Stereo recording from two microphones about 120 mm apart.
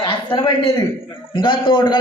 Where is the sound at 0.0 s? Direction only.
40° left (ahead or behind).